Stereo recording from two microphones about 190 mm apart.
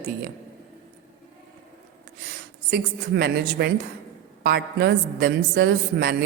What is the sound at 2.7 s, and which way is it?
A woman's voice, 60° right (ahead or behind).